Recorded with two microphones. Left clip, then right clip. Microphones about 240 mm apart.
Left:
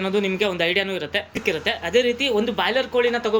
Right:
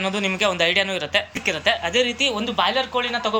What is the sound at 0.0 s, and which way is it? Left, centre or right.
Speech, centre.